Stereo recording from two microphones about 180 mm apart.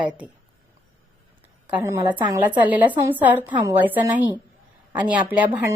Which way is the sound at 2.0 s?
25° right (ahead or behind).